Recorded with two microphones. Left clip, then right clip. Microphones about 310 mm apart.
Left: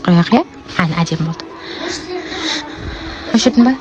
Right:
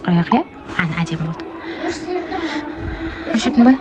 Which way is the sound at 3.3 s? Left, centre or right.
Centre.